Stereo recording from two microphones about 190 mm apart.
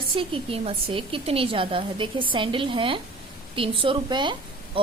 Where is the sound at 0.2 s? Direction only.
30° right (ahead or behind).